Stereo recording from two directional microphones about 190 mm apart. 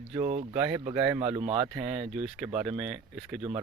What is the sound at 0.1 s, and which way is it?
Speech, 35° right (ahead or behind).